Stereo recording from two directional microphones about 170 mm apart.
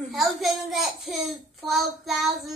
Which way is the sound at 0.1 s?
Centre (ahead or behind).